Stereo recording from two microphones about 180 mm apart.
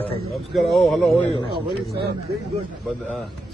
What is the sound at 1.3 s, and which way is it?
Speech, 25° left (ahead or behind).